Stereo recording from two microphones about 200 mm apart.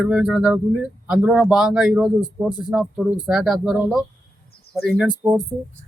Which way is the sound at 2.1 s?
20° left (ahead or behind).